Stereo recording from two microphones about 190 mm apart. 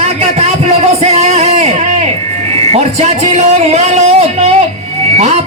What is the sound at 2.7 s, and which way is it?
A man's voice, 35° right (ahead or behind).